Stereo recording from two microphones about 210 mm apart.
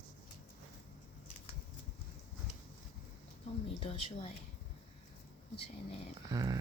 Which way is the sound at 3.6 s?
25° left (ahead or behind).